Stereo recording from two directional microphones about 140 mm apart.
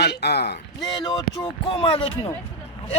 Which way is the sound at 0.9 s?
30° left (ahead or behind).